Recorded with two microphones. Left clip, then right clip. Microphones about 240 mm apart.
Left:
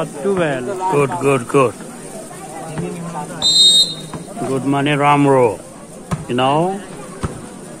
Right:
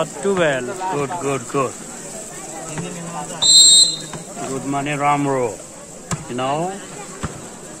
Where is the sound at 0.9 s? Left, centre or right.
Left.